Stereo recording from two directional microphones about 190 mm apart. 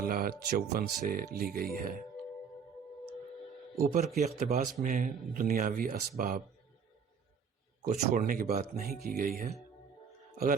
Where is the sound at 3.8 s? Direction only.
50° right (ahead or behind).